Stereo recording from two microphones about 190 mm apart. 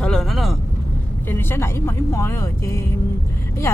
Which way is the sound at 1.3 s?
10° left (ahead or behind).